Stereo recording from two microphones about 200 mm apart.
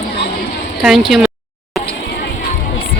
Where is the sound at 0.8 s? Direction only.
Centre (ahead or behind).